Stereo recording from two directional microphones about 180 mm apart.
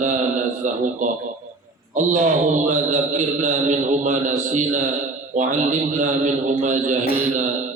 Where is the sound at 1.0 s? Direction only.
45° right (ahead or behind).